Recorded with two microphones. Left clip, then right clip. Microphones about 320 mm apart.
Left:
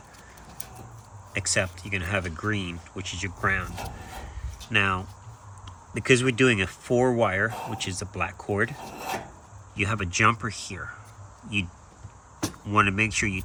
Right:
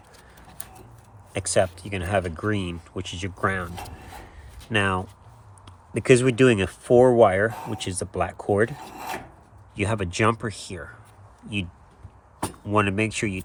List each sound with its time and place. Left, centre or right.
1.3 s speech: centre
4.7 s speech: centre
9.7 s speech: centre
12.6 s speech: centre